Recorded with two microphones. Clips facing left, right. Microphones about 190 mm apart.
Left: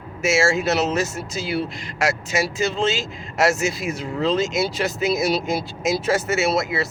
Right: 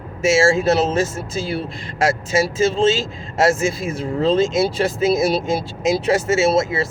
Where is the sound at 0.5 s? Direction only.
30° right (ahead or behind).